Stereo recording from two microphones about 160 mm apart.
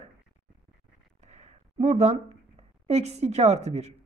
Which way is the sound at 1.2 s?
40° right (ahead or behind).